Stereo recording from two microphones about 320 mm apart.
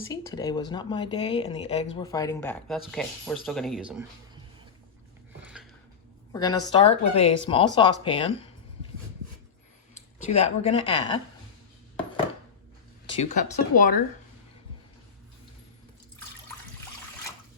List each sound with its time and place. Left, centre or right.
0.1 s speech: centre
6.3 s speech: centre
10.4 s speech: centre
13.1 s speech: left